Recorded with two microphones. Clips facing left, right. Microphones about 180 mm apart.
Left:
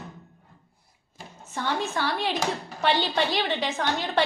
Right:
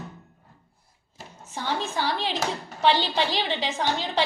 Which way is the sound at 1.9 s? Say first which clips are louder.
Even; 55° left (ahead or behind).